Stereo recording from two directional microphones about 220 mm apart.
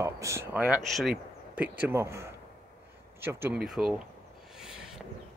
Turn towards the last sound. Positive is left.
turn(degrees=0)  # may be behind; listen again after turning